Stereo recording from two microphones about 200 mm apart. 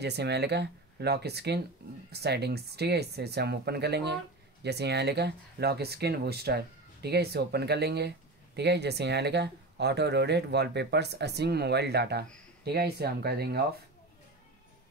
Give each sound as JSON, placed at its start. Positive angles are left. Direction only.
{"t": 0.0, "sound": "speech", "side_deg": -60}